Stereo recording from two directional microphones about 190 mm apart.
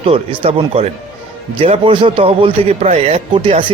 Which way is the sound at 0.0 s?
30° right (ahead or behind).